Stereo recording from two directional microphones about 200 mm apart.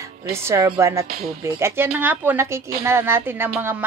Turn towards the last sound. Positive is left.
turn(degrees=-10)  # may be behind; listen again after turning